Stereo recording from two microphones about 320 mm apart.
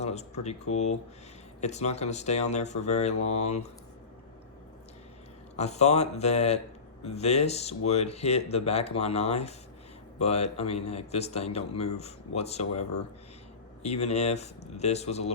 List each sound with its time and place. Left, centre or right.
0.0 s speech: left
5.5 s speech: left
13.8 s speech: centre